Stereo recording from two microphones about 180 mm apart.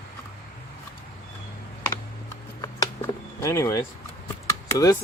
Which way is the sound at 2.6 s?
20° left (ahead or behind).